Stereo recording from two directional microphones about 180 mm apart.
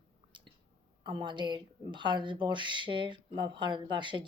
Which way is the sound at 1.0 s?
25° right (ahead or behind).